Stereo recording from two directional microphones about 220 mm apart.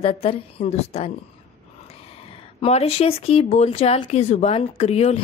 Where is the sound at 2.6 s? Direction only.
25° left (ahead or behind).